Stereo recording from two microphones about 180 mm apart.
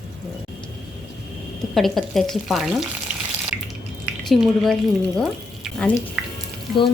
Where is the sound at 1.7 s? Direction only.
Centre (ahead or behind).